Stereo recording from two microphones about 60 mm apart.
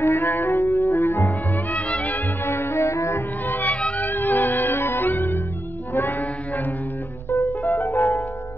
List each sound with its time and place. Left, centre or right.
0.0 s music: left
0.5 s music: left
1.7 s music: left
2.4 s music: left
3.4 s music: left
4.6 s music: left
7.2 s music: left
7.7 s music: left